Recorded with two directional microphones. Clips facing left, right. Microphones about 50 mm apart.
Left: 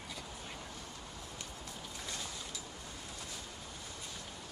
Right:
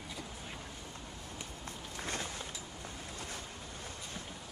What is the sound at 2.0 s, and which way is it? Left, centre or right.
Walk, right.